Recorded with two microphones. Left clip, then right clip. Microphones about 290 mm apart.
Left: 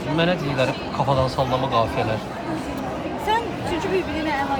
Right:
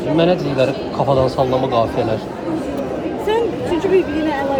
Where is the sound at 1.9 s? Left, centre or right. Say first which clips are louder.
Right 5 dB; centre.